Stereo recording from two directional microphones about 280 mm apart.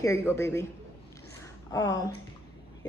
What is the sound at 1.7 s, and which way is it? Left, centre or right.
Speech, centre.